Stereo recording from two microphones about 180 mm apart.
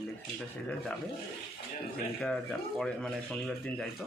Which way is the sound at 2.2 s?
5° left (ahead or behind).